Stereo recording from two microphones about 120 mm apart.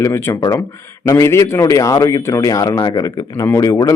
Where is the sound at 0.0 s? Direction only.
25° left (ahead or behind).